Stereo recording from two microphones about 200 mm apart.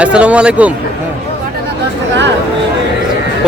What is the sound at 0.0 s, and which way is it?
Speech, 5° right (ahead or behind).